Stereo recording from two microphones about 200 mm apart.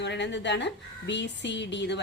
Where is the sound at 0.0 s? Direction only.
60° left (ahead or behind).